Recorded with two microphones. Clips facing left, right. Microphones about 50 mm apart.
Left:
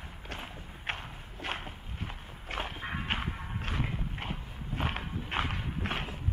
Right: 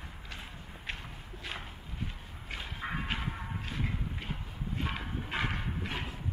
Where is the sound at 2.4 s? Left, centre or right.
Left.